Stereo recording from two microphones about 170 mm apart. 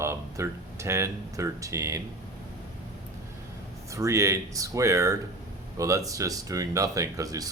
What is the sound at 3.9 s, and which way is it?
Speech, 15° right (ahead or behind).